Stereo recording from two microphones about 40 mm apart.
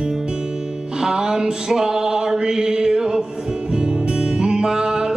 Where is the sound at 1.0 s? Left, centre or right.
Centre.